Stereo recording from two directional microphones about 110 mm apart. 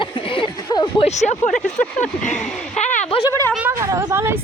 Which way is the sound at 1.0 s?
85° left.